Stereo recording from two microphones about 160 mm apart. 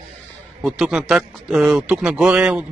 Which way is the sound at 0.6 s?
Centre (ahead or behind).